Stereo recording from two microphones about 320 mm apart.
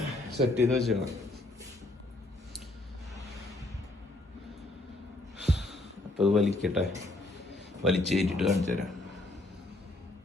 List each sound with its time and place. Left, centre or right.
0.3 s speech: right
0.8 s speech: centre
5.4 s a sound: centre
6.6 s speech: centre